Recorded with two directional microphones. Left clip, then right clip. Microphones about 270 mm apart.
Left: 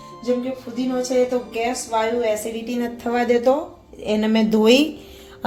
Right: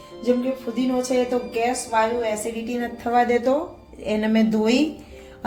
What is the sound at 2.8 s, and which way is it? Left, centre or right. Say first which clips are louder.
A woman's voice: right 3 dB; left.